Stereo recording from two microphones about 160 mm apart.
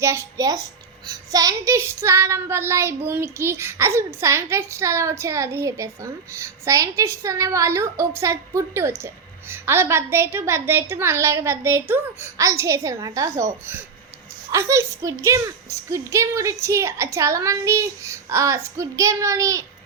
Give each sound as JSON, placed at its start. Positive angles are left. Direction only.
{"t": 0.0, "sound": "a woman's voice", "side_deg": -15}
{"t": 1.0, "sound": "child singing", "side_deg": -25}
{"t": 12.4, "sound": "a woman's voice", "side_deg": -20}
{"t": 14.5, "sound": "child singing", "side_deg": -20}
{"t": 15.9, "sound": "a woman's voice", "side_deg": -20}